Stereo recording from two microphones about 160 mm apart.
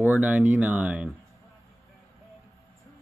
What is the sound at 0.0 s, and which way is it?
Speech, 10° right (ahead or behind).